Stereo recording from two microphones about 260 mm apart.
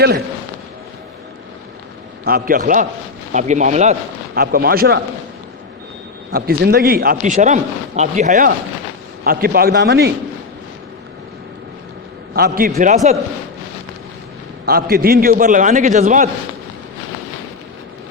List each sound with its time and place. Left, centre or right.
2.2 s a man's voice: right
6.3 s a man's voice: right
12.3 s a man's voice: right
14.7 s a man's voice: right